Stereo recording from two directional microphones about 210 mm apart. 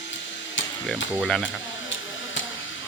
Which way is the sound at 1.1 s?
Centre (ahead or behind).